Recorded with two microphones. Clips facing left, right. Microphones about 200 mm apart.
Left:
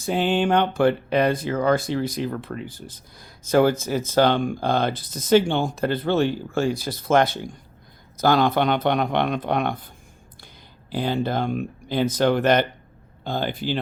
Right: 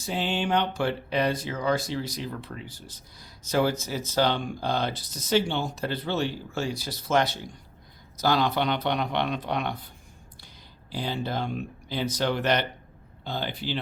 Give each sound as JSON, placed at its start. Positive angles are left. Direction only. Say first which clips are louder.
{"t": 0.0, "sound": "speech", "louder": "left 7 dB", "side_deg": 55}
{"t": 10.9, "sound": "speech", "louder": "left 7 dB", "side_deg": 50}